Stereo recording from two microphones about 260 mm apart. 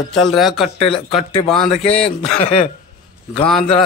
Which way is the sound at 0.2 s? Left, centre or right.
Centre.